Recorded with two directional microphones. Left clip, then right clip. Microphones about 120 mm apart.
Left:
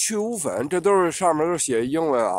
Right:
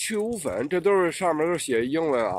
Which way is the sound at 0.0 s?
30° left (ahead or behind).